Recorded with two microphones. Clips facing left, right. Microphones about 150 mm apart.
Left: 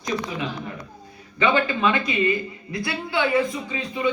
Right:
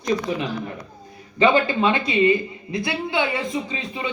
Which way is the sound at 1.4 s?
30° right (ahead or behind).